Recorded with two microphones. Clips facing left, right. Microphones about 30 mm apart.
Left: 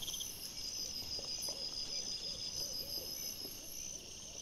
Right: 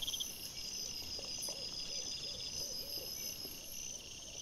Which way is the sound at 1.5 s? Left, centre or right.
Centre.